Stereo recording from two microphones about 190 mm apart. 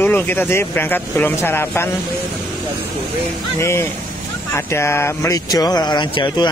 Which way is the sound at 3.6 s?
15° left (ahead or behind).